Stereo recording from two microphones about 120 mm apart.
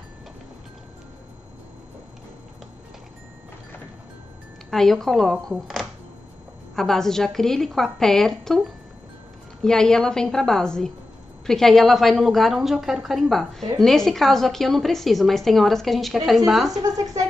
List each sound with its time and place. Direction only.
4.6 s a woman's voice: centre (ahead or behind)
6.7 s a woman's voice: 5° left (ahead or behind)
16.7 s speech: 30° right (ahead or behind)